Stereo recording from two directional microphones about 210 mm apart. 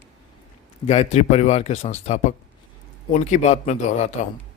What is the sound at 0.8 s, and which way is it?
Speech, 30° left (ahead or behind).